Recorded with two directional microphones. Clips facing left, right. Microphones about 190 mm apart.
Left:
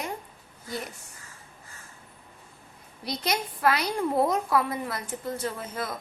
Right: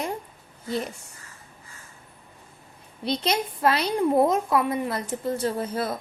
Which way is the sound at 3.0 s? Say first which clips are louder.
Right 4 dB; 25° right (ahead or behind).